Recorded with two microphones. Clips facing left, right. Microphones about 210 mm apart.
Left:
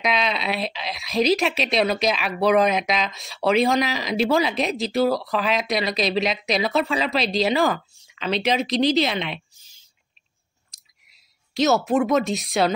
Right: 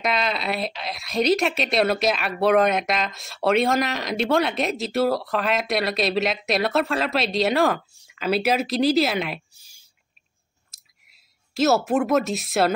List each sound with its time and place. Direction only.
0.0 s a woman's voice: centre (ahead or behind)
11.1 s a woman's voice: centre (ahead or behind)